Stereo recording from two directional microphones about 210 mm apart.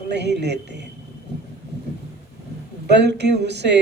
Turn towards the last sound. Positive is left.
turn(degrees=-55)  # may be behind; listen again after turning